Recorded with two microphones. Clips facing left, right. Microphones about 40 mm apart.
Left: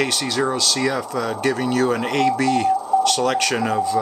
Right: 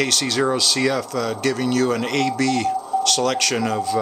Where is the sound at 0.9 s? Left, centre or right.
Left.